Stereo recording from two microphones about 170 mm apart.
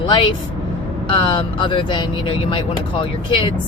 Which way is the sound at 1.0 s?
30° left (ahead or behind).